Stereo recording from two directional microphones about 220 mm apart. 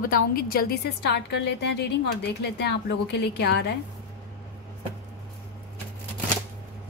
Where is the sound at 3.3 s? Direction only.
50° left (ahead or behind).